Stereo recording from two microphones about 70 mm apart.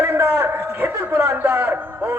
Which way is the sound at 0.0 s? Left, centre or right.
Right.